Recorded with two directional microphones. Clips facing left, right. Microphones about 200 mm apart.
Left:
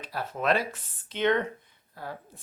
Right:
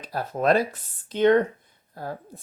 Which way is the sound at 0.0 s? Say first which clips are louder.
Right 6 dB; 40° right (ahead or behind).